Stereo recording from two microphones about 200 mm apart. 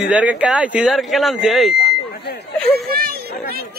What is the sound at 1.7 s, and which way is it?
Buzzer, 50° left (ahead or behind).